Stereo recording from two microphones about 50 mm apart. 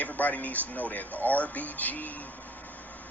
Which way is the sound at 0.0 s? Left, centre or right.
Left.